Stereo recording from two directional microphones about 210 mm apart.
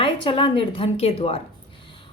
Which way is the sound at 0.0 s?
25° left (ahead or behind).